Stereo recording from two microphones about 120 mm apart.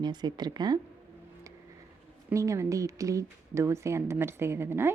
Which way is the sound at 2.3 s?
25° right (ahead or behind).